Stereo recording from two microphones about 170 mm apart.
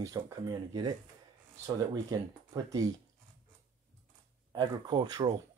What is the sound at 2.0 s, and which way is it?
Speech, 20° right (ahead or behind).